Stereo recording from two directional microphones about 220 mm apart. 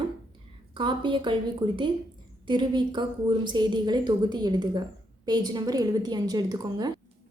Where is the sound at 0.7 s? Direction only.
20° right (ahead or behind).